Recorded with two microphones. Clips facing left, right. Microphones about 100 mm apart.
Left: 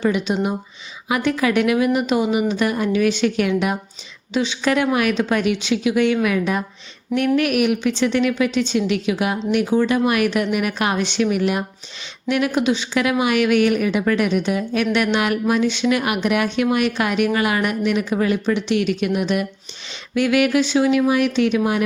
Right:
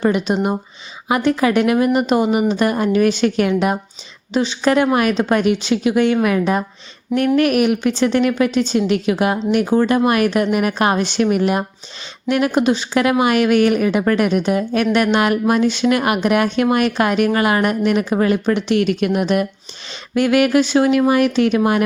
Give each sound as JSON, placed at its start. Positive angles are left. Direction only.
{"t": 0.0, "sound": "a woman's voice", "side_deg": -40}